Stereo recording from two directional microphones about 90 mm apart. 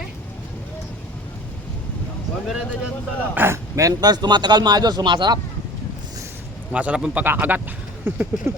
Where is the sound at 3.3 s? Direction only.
25° right (ahead or behind).